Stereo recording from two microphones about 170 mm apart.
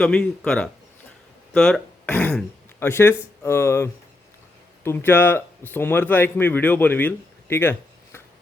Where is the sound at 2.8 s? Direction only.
15° left (ahead or behind).